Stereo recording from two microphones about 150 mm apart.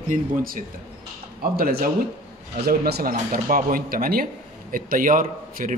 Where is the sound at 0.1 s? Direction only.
65° right (ahead or behind).